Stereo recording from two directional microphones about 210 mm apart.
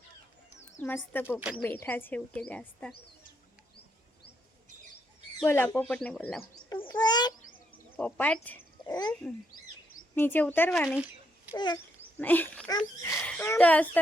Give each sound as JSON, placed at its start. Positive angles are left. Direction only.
{"t": 0.8, "sound": "speech", "side_deg": 10}
{"t": 5.4, "sound": "speech", "side_deg": 10}
{"t": 6.7, "sound": "a sound", "side_deg": 20}
{"t": 7.9, "sound": "speech", "side_deg": 5}
{"t": 8.9, "sound": "speech", "side_deg": 20}
{"t": 10.2, "sound": "speech", "side_deg": 10}
{"t": 11.5, "sound": "speech", "side_deg": 20}
{"t": 12.1, "sound": "a woman's voice", "side_deg": 10}